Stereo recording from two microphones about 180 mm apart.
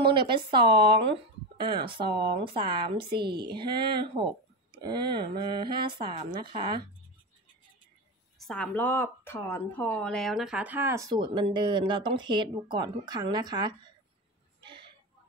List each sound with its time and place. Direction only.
0.1 s speech: 25° right (ahead or behind)
8.4 s speech: 5° left (ahead or behind); by 13.9 s 25° right (ahead or behind)